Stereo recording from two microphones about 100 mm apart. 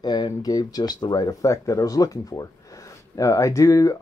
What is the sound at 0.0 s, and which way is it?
Speech, 45° left (ahead or behind).